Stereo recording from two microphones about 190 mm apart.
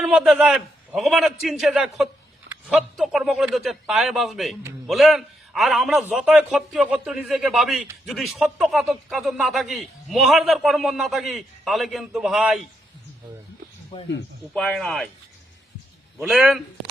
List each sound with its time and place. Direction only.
0.0 s a man's voice: 5° right (ahead or behind)
14.5 s a man's voice: 5° left (ahead or behind)
16.2 s a man's voice: 5° right (ahead or behind)